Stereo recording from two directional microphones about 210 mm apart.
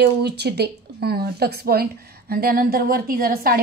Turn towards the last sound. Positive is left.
turn(degrees=-45)  # may be behind; listen again after turning